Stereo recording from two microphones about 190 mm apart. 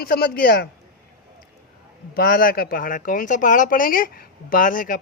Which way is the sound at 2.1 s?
50° left (ahead or behind).